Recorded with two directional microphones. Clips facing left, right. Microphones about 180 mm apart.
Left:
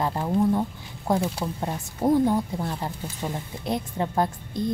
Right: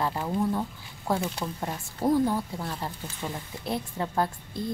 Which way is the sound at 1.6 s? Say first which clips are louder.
Left 4 dB; 20° left (ahead or behind).